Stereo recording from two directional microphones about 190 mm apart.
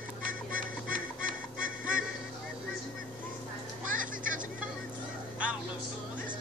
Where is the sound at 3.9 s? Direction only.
45° right (ahead or behind).